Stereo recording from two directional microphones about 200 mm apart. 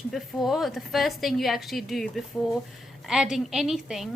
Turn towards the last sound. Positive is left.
turn(degrees=0)  # may be behind; listen again after turning